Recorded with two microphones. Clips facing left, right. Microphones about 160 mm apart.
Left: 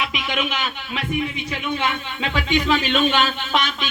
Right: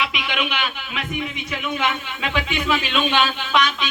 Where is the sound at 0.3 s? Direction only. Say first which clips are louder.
Even; 40° left (ahead or behind).